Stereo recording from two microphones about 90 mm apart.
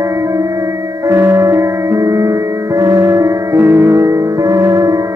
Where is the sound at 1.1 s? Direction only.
30° right (ahead or behind).